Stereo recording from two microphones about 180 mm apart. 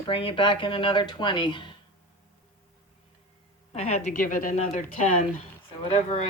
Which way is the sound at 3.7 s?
35° left (ahead or behind).